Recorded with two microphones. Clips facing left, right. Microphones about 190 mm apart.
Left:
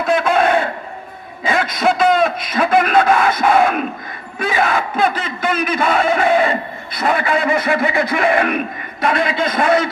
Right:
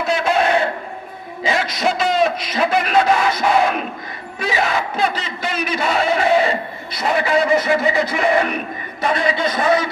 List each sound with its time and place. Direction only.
0.0 s crowd: 55° left (ahead or behind)
1.4 s a sound: 55° left (ahead or behind)
4.4 s speech: 55° left (ahead or behind)